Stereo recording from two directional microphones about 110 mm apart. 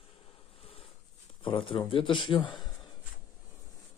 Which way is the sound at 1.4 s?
50° left (ahead or behind).